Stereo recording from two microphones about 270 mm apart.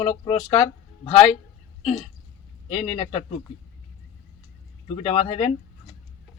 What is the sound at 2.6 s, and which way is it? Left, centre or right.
Speech, left.